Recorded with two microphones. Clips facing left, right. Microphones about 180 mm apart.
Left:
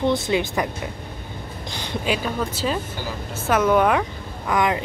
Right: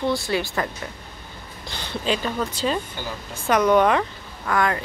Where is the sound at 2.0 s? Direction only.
10° left (ahead or behind).